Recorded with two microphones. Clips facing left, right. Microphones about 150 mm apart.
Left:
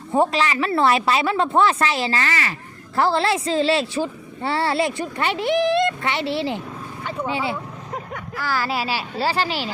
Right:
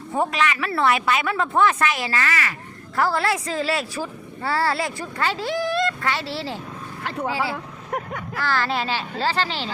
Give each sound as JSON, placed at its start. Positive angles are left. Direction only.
{"t": 0.1, "sound": "a woman's voice", "side_deg": 30}
{"t": 7.5, "sound": "vehicle", "side_deg": -65}
{"t": 8.4, "sound": "a child's voice", "side_deg": 10}